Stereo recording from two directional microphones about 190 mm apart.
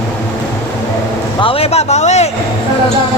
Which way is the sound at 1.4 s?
30° left (ahead or behind).